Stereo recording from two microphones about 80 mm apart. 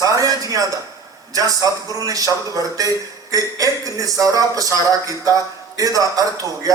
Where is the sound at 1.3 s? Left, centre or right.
Right.